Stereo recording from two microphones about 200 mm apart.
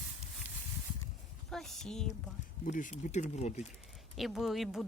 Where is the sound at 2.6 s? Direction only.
40° left (ahead or behind).